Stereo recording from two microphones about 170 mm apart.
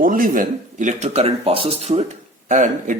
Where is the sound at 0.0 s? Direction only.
55° right (ahead or behind).